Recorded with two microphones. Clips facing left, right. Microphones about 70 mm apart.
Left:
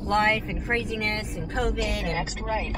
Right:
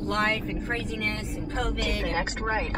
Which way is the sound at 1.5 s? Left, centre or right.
Centre.